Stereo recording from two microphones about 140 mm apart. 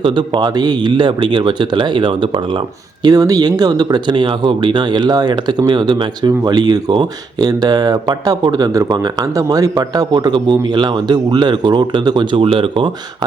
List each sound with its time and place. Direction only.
0.0 s speech: 35° right (ahead or behind)